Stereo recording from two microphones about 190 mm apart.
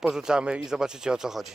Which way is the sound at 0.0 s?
5° right (ahead or behind).